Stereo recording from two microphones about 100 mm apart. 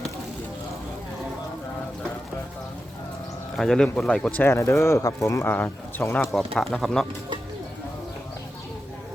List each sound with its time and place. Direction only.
3.6 s speech: 5° left (ahead or behind)
4.5 s speech: 30° left (ahead or behind)
5.5 s speech: 20° left (ahead or behind)
6.1 s speech: 5° left (ahead or behind)